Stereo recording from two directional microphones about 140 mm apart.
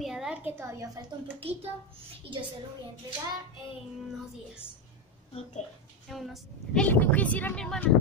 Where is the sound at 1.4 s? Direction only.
45° right (ahead or behind).